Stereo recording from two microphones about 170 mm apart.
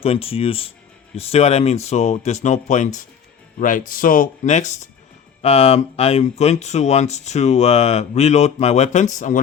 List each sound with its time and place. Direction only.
0.0 s speech: 35° left (ahead or behind)